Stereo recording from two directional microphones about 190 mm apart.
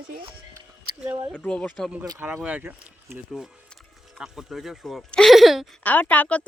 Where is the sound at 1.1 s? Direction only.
15° right (ahead or behind).